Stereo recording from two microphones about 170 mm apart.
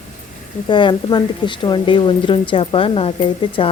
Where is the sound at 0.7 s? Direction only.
30° left (ahead or behind).